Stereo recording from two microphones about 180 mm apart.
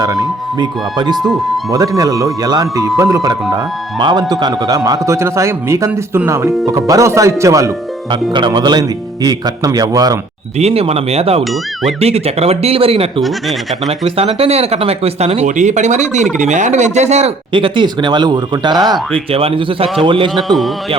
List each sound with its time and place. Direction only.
0.0 s speech: 20° right (ahead or behind)
1.1 s speech: centre (ahead or behind)
1.7 s a man's voice: 20° right (ahead or behind)
10.6 s speech: 35° right (ahead or behind)
13.2 s speech: centre (ahead or behind)
13.8 s speech: 35° right (ahead or behind)
20.3 s speech: centre (ahead or behind)